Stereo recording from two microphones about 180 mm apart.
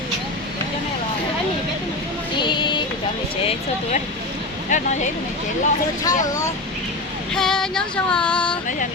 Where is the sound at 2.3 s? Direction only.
25° left (ahead or behind).